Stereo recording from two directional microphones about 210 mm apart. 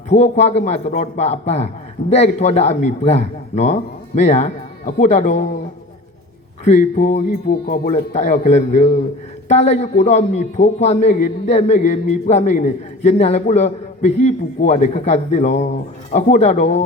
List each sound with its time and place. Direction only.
0.1 s a man's voice: 30° left (ahead or behind)
6.7 s a man's voice: 35° left (ahead or behind)